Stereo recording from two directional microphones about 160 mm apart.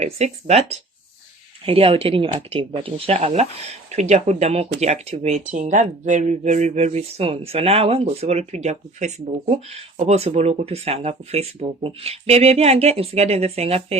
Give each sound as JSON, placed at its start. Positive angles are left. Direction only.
{"t": 0.0, "sound": "speech", "side_deg": -40}